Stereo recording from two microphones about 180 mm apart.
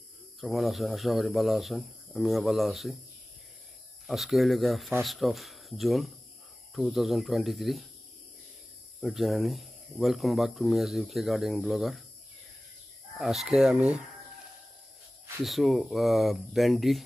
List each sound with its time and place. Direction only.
0.4 s speech: centre (ahead or behind)
4.1 s speech: centre (ahead or behind)
9.0 s speech: centre (ahead or behind)
13.2 s speech: centre (ahead or behind)
15.4 s speech: centre (ahead or behind)